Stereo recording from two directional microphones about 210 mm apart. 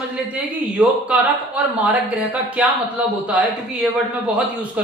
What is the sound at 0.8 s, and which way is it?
Speech, 5° right (ahead or behind).